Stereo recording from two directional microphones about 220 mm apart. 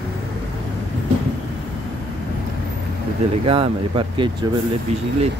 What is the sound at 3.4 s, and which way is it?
Speech, 25° right (ahead or behind).